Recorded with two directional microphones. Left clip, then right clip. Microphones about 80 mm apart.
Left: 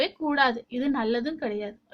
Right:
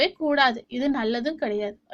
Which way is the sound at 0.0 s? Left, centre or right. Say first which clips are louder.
Right 3 dB; right.